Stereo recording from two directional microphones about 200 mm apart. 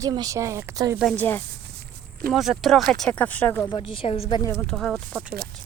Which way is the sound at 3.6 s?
25° left (ahead or behind).